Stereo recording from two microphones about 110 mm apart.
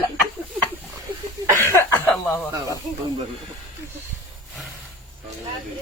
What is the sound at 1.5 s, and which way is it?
Cough, 25° left (ahead or behind).